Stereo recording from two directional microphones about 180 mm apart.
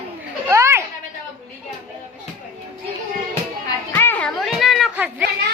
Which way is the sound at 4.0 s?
10° left (ahead or behind).